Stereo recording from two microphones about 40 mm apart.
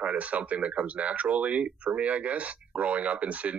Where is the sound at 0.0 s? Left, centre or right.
Right.